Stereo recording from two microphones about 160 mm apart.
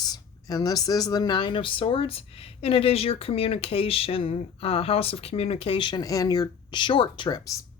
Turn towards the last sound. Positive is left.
turn(degrees=25)  # may be behind; listen again after turning